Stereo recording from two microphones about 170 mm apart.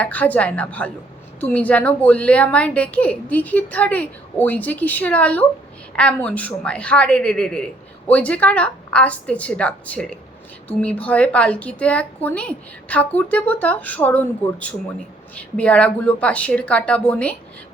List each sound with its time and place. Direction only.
0.0 s a woman's voice: 10° left (ahead or behind)